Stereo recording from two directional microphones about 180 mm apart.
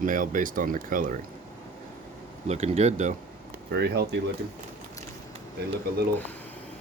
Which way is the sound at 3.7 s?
65° right (ahead or behind).